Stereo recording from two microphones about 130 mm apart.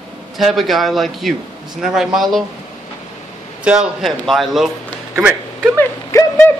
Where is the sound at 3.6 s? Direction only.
5° right (ahead or behind).